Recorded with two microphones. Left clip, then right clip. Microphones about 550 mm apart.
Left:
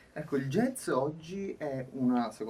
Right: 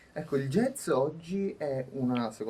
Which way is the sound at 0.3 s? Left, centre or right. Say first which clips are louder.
Right 2 dB; right.